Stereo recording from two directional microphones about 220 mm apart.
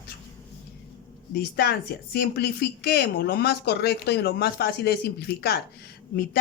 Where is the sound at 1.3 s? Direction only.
45° left (ahead or behind).